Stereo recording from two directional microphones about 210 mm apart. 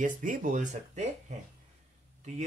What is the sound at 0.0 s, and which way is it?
Speech, 40° right (ahead or behind).